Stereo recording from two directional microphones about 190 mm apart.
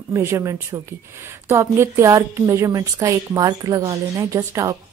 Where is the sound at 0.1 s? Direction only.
15° right (ahead or behind).